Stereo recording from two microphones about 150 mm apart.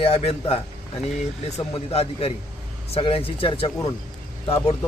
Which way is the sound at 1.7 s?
40° left (ahead or behind).